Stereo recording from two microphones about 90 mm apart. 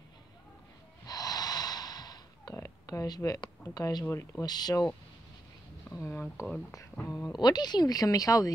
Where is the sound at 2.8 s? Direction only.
45° left (ahead or behind).